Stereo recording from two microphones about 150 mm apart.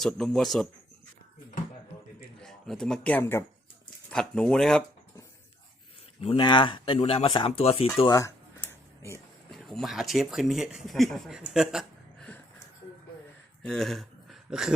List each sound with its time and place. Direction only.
0.0 s speech: centre (ahead or behind)
2.4 s speech: 5° left (ahead or behind)
6.2 s speech: 35° left (ahead or behind)
8.1 s a sound: 20° left (ahead or behind)
9.5 s speech: centre (ahead or behind)
13.6 s a sound: centre (ahead or behind)